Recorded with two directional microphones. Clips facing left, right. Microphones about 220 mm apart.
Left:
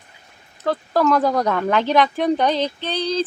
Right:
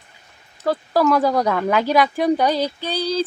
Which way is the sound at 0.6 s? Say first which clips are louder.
Right 1 dB; 10° right (ahead or behind).